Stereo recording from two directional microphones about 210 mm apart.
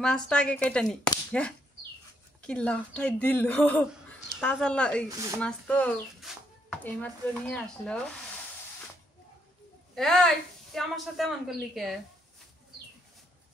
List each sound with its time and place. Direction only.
0.0 s speech: 5° left (ahead or behind)
5.0 s speech: 15° right (ahead or behind)
5.4 s speech: 5° left (ahead or behind)
9.9 s speech: centre (ahead or behind)